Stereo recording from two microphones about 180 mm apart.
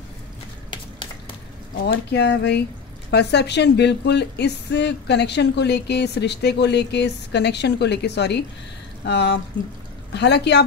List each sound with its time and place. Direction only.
1.9 s a woman's voice: 70° left (ahead or behind)